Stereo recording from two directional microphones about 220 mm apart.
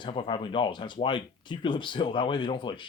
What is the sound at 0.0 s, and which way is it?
Speech, 20° left (ahead or behind).